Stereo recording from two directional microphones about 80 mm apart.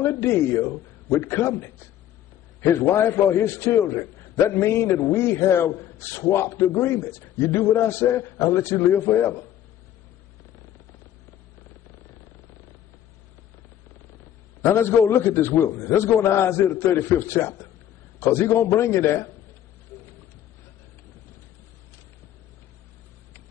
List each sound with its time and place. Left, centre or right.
0.0 s a man's voice: left
2.7 s a man's voice: left
14.6 s a man's voice: left